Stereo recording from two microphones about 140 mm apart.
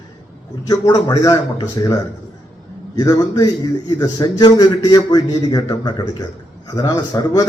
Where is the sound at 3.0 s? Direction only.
30° left (ahead or behind).